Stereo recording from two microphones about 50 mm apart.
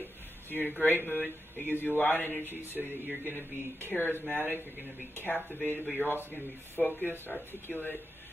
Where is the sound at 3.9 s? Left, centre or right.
Left.